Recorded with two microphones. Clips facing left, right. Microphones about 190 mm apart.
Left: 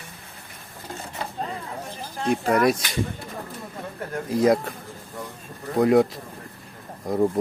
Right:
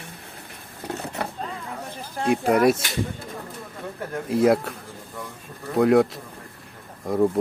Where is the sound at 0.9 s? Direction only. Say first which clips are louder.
Right 3 dB; 65° right (ahead or behind).